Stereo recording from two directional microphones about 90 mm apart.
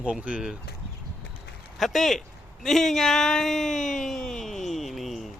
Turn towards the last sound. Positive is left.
turn(degrees=0)  # may be behind; listen again after turning